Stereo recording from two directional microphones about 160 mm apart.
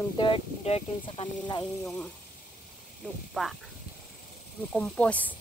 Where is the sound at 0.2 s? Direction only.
35° left (ahead or behind).